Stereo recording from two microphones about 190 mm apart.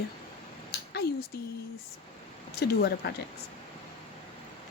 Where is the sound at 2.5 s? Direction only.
55° left (ahead or behind).